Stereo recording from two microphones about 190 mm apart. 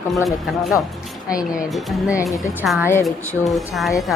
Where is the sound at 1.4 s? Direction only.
Centre (ahead or behind).